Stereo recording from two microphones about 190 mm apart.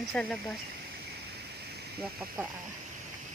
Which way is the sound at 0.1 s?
5° left (ahead or behind).